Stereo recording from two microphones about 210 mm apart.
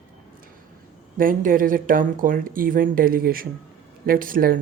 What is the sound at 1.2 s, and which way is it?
Speech, 40° right (ahead or behind).